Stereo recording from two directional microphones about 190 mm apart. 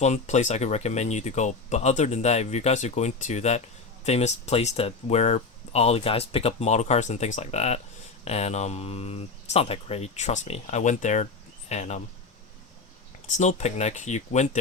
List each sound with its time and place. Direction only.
0.0 s speech: 35° left (ahead or behind)
13.2 s speech: 40° left (ahead or behind)